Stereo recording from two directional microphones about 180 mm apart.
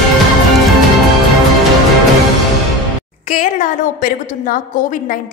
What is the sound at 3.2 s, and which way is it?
A woman's voice, 45° left (ahead or behind).